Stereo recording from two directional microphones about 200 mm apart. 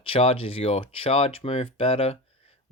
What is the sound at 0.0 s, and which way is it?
Speech, 30° left (ahead or behind).